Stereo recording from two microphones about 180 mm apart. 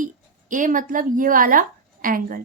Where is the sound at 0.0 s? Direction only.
45° right (ahead or behind).